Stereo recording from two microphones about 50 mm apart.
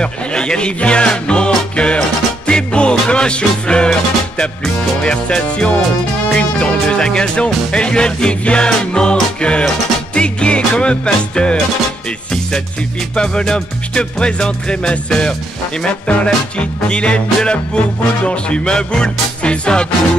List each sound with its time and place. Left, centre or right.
0.0 s speech: centre
5.0 s music: centre
13.1 s music: centre